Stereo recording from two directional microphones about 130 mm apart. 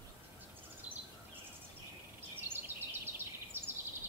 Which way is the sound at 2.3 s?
15° right (ahead or behind).